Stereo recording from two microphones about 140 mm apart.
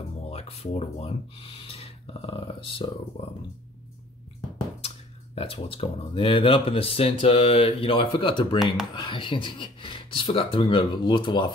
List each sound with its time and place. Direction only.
0.3 s speech: 45° left (ahead or behind)
4.8 s speech: 45° left (ahead or behind)